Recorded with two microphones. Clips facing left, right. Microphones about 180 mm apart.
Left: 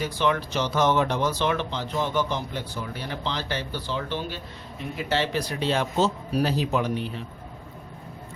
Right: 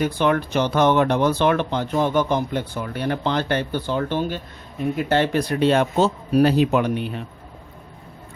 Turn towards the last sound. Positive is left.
turn(degrees=-60)  # may be behind; listen again after turning